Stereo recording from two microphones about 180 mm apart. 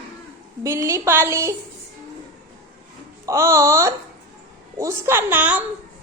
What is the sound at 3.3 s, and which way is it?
A woman's voice, 15° right (ahead or behind).